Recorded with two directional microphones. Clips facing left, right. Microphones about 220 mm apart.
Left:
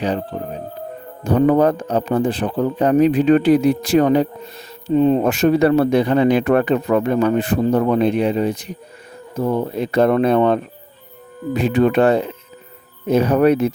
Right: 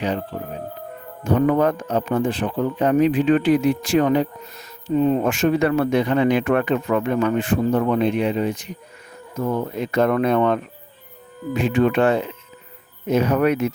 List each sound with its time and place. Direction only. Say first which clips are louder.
0.3 s a man's voice: left 3 dB; 40° left (ahead or behind)